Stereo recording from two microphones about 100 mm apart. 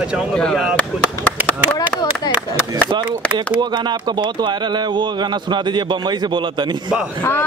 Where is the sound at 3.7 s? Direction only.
50° right (ahead or behind).